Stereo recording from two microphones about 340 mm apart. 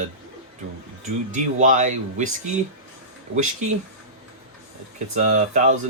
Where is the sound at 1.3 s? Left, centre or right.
Right.